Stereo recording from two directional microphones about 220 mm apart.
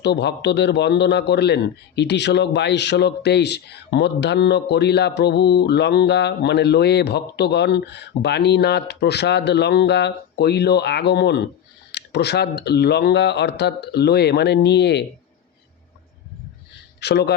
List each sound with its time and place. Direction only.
0.0 s a man's voice: 50° left (ahead or behind)
17.0 s a man's voice: 50° left (ahead or behind)